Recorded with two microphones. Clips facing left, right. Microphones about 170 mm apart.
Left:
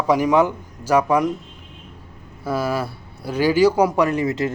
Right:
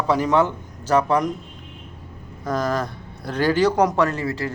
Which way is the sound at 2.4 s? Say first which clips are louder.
Left 1 dB; 10° left (ahead or behind).